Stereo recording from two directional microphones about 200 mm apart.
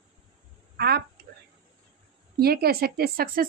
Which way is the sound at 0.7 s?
50° right (ahead or behind).